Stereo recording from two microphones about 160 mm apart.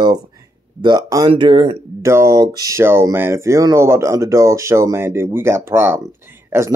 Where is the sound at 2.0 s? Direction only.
15° right (ahead or behind).